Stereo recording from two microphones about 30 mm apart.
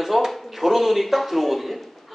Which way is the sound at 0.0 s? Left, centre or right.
Centre.